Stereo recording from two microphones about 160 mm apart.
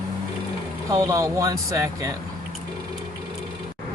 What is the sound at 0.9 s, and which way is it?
Speech, 20° right (ahead or behind).